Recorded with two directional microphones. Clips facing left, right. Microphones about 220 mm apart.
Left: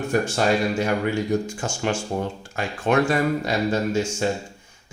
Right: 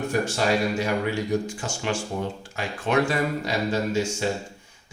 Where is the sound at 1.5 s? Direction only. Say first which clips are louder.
Left 3 dB; 45° left (ahead or behind).